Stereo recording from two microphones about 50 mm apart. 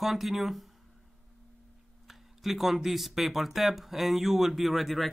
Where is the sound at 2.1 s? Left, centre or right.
Centre.